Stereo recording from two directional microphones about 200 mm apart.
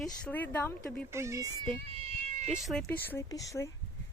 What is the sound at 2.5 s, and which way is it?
Speech, centre (ahead or behind).